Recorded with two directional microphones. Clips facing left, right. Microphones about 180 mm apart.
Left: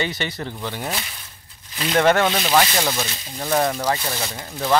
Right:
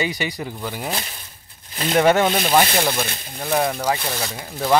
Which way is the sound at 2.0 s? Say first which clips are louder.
Right 1 dB; 10° right (ahead or behind).